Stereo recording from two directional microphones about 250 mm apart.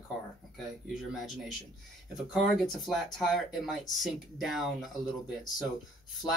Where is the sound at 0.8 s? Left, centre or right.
Centre.